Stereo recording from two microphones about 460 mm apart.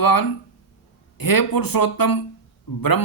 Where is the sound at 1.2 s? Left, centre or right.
Left.